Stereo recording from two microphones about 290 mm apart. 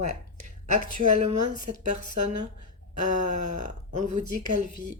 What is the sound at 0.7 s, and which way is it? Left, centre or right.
Speech, right.